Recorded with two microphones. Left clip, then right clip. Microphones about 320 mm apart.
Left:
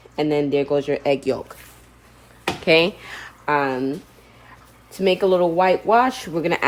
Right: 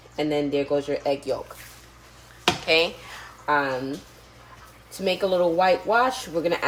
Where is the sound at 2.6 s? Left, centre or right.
Left.